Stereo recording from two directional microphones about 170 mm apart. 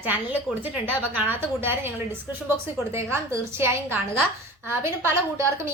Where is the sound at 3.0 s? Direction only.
15° right (ahead or behind).